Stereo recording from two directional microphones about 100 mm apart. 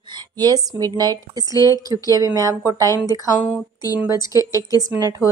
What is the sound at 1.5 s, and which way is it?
Speech, 40° left (ahead or behind).